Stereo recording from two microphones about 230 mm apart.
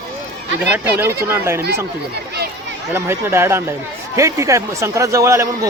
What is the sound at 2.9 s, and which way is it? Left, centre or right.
Speech, centre.